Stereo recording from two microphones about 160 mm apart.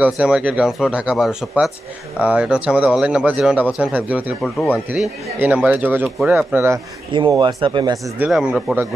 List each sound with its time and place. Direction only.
0.0 s a man's voice: 5° right (ahead or behind)
4.4 s speech: 5° left (ahead or behind)
5.4 s a man's voice: 10° right (ahead or behind)
7.1 s speech: 30° right (ahead or behind)
8.2 s speech: 5° right (ahead or behind)